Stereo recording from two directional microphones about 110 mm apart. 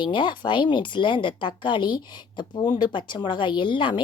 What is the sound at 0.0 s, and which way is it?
A woman's voice, 45° left (ahead or behind).